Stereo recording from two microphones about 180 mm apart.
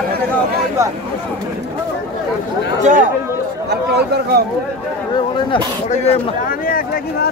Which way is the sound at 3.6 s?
65° right (ahead or behind).